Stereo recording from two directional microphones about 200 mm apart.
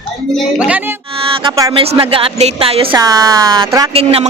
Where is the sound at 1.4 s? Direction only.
15° right (ahead or behind).